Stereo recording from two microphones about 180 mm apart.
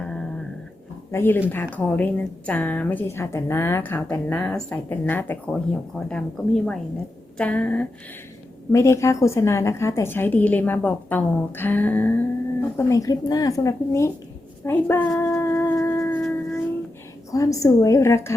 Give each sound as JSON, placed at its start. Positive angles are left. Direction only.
{"t": 1.1, "sound": "a woman's voice", "side_deg": 10}
{"t": 14.6, "sound": "a sound", "side_deg": 10}
{"t": 17.3, "sound": "a woman's voice", "side_deg": 20}